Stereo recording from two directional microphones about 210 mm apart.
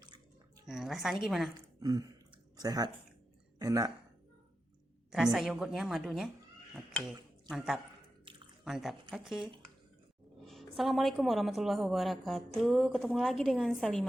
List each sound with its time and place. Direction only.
0.6 s a woman's voice: centre (ahead or behind)
1.5 s a woman's voice: 15° right (ahead or behind)
5.1 s a woman's voice: centre (ahead or behind)